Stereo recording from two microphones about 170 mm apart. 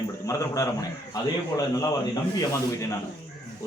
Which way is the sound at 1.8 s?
20° left (ahead or behind).